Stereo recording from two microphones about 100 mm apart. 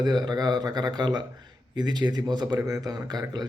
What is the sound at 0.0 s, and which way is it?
A man's voice, 45° right (ahead or behind).